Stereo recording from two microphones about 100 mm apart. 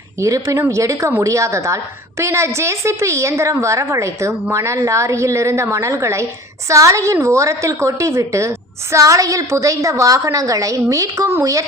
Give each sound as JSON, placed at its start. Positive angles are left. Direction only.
{"t": 0.2, "sound": "a woman's voice", "side_deg": -35}